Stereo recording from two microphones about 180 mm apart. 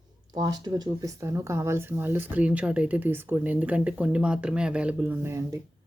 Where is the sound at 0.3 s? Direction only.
20° right (ahead or behind).